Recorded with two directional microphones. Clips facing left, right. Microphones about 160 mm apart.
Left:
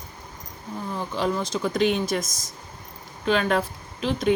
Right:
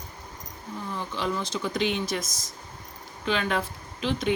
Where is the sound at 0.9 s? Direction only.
40° left (ahead or behind).